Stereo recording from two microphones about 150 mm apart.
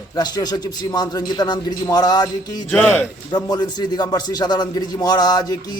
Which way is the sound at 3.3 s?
30° left (ahead or behind).